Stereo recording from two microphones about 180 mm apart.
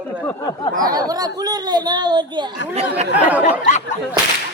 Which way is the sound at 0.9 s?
20° right (ahead or behind).